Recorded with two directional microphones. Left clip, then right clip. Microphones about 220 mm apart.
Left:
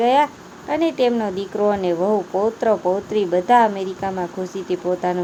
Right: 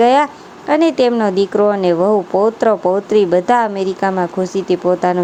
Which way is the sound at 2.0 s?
40° right (ahead or behind).